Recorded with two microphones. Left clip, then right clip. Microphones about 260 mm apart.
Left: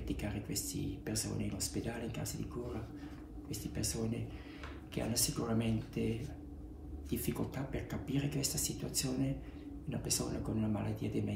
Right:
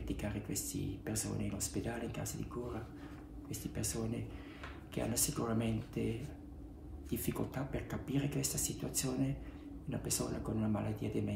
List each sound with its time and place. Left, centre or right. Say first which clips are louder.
0.1 s speech: left 1 dB; centre
3.4 s speech: left 2 dB; centre